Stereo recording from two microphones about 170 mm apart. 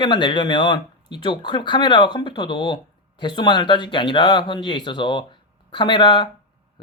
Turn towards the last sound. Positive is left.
turn(degrees=25)  # may be behind; listen again after turning